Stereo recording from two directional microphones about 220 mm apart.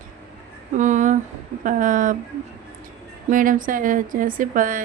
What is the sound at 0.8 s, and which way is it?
A woman's voice, 35° right (ahead or behind).